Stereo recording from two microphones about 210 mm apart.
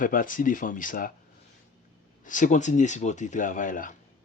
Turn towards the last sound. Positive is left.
turn(degrees=40)  # may be behind; listen again after turning